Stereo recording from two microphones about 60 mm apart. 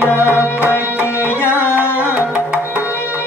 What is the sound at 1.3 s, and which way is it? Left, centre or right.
Tabla, left.